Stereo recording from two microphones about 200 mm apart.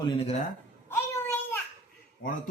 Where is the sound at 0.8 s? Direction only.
10° left (ahead or behind).